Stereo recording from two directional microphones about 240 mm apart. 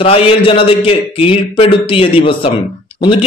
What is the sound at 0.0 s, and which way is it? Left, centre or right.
A man's voice, left.